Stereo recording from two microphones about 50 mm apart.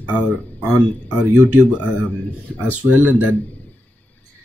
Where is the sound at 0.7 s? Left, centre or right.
Right.